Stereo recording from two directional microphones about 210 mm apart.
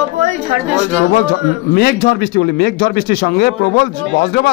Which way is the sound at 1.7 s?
50° left (ahead or behind).